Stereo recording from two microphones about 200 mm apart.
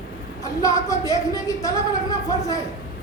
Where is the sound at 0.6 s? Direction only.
15° left (ahead or behind).